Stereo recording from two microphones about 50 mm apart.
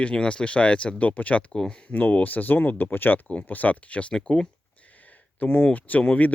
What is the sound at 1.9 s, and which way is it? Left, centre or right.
Speech, left.